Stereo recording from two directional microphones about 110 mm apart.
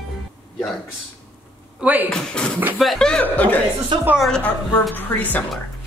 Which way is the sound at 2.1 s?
5° left (ahead or behind).